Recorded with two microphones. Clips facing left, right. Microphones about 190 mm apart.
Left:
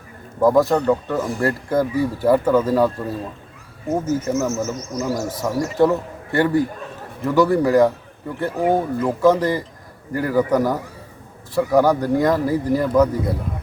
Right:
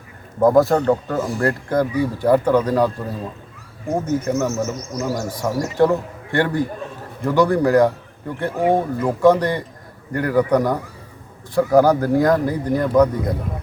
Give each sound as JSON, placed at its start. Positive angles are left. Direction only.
{"t": 0.4, "sound": "a man's voice", "side_deg": 0}